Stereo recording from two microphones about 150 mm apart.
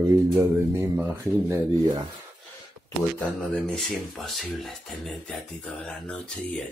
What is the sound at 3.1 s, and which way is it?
Speech, 5° left (ahead or behind).